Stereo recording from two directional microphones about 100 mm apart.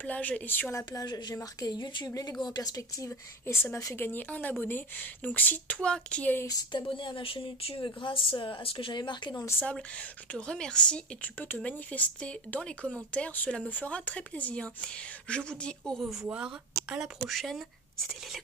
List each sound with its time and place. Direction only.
0.0 s speech: 15° left (ahead or behind)
1.0 s a woman's voice: 45° left (ahead or behind)
2.0 s a woman's voice: 35° left (ahead or behind)
3.1 s a woman's voice: 25° left (ahead or behind)
6.7 s speech: 55° left (ahead or behind)
9.5 s a woman's voice: 15° left (ahead or behind); by 17.1 s 10° right (ahead or behind)
17.3 s speech: centre (ahead or behind)